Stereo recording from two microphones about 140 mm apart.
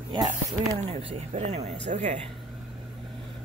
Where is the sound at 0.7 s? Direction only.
50° right (ahead or behind).